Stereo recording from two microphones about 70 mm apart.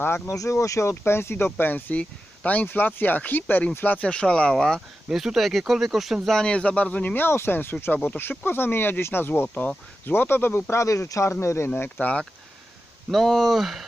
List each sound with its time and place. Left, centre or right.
0.0 s speech: left
0.3 s speech: left; by 4.8 s centre
5.0 s speech: centre
6.3 s speech: centre; by 10.8 s left
10.8 s speech: left
11.9 s speech: centre
13.1 s speech: centre